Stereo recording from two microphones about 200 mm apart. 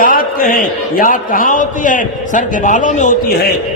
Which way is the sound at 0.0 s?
45° left (ahead or behind).